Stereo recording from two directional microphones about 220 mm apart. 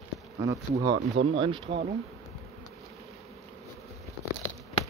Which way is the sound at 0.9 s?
60° right (ahead or behind).